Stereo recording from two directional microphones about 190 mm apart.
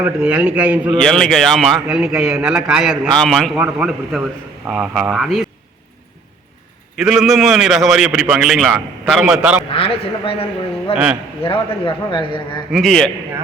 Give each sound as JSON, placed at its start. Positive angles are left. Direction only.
{"t": 0.0, "sound": "a man's voice", "side_deg": -5}
{"t": 6.9, "sound": "a man's voice", "side_deg": -5}
{"t": 9.6, "sound": "a man's voice", "side_deg": 30}
{"t": 10.9, "sound": "a man's voice", "side_deg": -5}
{"t": 11.4, "sound": "a man's voice", "side_deg": 30}
{"t": 12.7, "sound": "a man's voice", "side_deg": 0}